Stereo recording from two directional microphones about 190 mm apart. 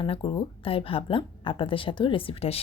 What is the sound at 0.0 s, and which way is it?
Speech, 25° left (ahead or behind).